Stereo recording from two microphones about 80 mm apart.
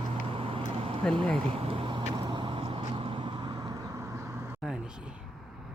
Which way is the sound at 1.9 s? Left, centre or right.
Right.